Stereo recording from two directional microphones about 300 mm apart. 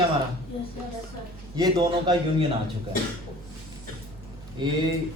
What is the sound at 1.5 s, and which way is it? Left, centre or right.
Speech, centre.